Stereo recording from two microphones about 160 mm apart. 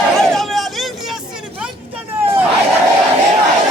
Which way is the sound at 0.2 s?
Centre (ahead or behind).